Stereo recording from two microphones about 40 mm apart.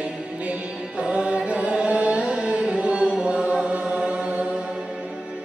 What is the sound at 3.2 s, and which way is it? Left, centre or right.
Chant, right.